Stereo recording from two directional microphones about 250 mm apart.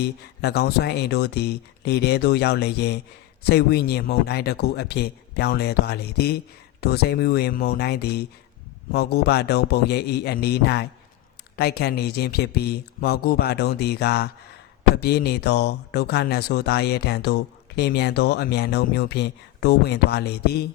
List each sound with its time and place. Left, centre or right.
0.0 s speech: left